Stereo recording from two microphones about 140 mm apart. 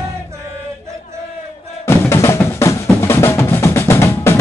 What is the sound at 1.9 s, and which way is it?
Drum, 20° left (ahead or behind).